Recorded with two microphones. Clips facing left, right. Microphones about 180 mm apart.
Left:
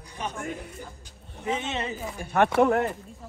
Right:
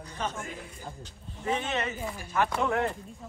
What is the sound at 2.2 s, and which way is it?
Speech, 65° left (ahead or behind).